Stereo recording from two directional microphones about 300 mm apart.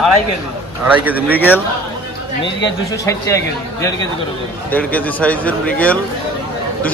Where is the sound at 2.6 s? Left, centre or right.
Centre.